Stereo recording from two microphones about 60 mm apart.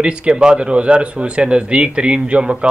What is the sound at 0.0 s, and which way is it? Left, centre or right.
Speech, centre.